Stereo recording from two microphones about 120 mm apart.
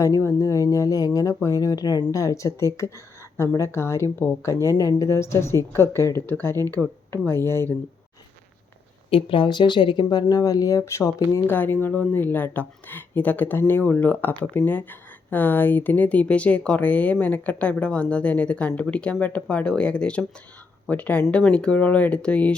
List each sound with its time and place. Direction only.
0.0 s speech: 25° left (ahead or behind)
9.0 s speech: 50° left (ahead or behind); by 22.5 s 10° left (ahead or behind)